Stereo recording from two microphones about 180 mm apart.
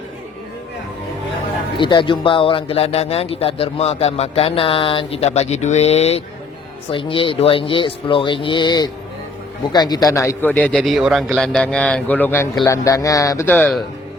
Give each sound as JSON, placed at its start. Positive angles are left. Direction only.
{"t": 1.8, "sound": "a man's voice", "side_deg": 25}